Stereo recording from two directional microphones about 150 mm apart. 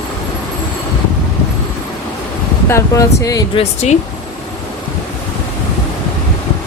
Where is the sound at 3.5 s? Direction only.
50° left (ahead or behind).